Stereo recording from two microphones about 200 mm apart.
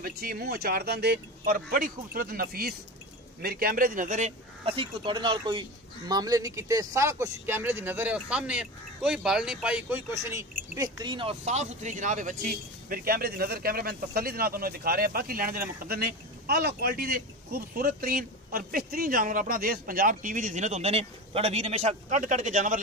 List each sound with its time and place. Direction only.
0.0 s a man's voice: 50° right (ahead or behind)